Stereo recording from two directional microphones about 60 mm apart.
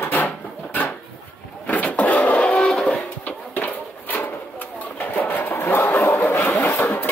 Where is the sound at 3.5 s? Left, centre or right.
Left.